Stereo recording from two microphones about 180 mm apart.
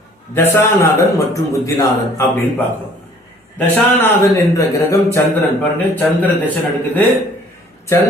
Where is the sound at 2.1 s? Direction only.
10° left (ahead or behind).